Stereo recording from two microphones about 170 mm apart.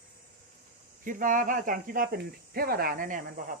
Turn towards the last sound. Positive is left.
turn(degrees=-50)  # may be behind; listen again after turning